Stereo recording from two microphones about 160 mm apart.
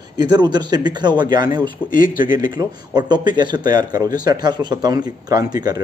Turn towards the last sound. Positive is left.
turn(degrees=-25)  # may be behind; listen again after turning